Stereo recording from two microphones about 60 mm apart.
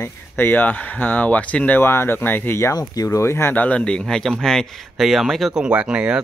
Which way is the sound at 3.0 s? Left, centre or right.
Left.